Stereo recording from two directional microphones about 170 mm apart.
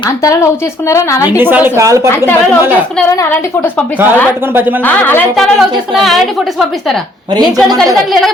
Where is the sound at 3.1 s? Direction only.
15° left (ahead or behind).